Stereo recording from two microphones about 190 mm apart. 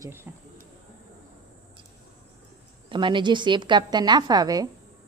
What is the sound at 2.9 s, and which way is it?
A woman's voice, 25° right (ahead or behind).